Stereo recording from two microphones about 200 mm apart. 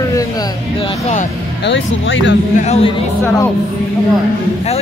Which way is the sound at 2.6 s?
30° left (ahead or behind).